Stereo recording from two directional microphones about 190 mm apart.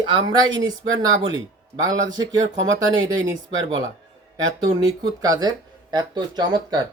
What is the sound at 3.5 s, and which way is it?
Speech, 85° right.